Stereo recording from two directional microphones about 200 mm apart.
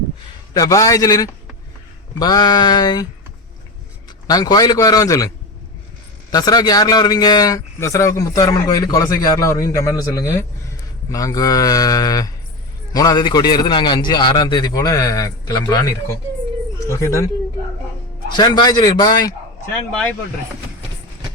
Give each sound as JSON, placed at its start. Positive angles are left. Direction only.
{"t": 0.5, "sound": "a man's voice", "side_deg": 15}
{"t": 4.3, "sound": "a man's voice", "side_deg": 20}
{"t": 6.3, "sound": "a man's voice", "side_deg": 20}
{"t": 16.9, "sound": "speech", "side_deg": 15}
{"t": 18.3, "sound": "a man's voice", "side_deg": 20}
{"t": 19.9, "sound": "speech", "side_deg": 5}